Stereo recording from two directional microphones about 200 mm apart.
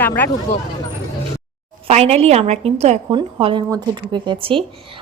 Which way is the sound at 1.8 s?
30° right (ahead or behind).